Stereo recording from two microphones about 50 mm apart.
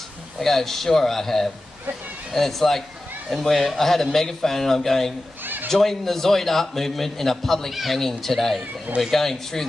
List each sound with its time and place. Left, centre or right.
0.4 s a man's voice: centre
5.4 s a sound: right
5.7 s a man's voice: centre